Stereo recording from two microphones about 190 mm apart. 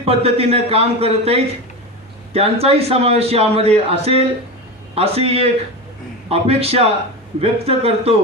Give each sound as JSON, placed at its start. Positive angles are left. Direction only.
{"t": 0.0, "sound": "a man's voice", "side_deg": -30}